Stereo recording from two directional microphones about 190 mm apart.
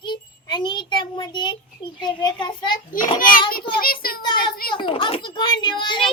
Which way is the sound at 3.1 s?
45° left (ahead or behind).